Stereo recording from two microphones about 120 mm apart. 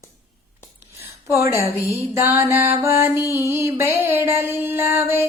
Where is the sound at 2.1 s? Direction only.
20° right (ahead or behind).